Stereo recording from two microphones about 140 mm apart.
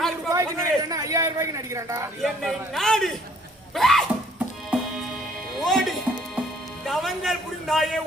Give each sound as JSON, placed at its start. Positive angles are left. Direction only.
{"t": 0.3, "sound": "a man's voice", "side_deg": -20}
{"t": 2.2, "sound": "a man's voice", "side_deg": 0}
{"t": 4.7, "sound": "music", "side_deg": 0}
{"t": 6.8, "sound": "a man's voice", "side_deg": 0}